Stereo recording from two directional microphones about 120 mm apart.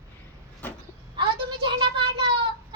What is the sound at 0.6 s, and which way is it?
Speech, 15° left (ahead or behind).